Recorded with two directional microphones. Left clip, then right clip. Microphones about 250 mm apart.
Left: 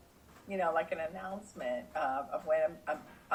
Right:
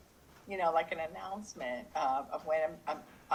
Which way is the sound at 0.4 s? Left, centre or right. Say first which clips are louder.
Right 1 dB; right.